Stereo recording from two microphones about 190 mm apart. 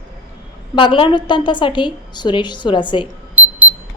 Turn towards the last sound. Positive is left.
turn(degrees=-5)  # may be behind; listen again after turning